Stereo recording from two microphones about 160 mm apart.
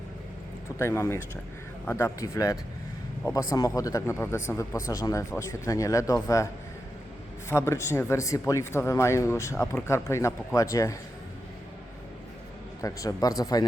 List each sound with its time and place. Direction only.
0.8 s speech: 15° left (ahead or behind)
7.5 s speech: 15° left (ahead or behind)
12.8 s speech: 20° left (ahead or behind)